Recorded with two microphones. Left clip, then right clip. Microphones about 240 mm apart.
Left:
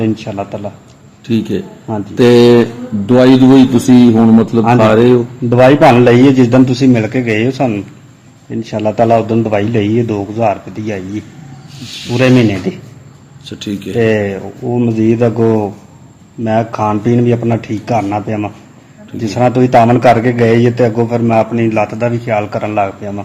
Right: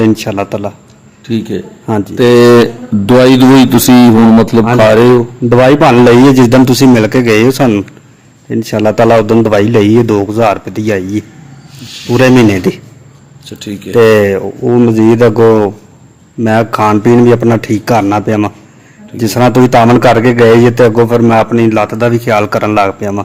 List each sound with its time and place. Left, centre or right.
0.0 s a man's voice: right
1.3 s a man's voice: centre
2.4 s a man's voice: right
13.4 s speech: centre
14.0 s a man's voice: right
16.4 s a man's voice: right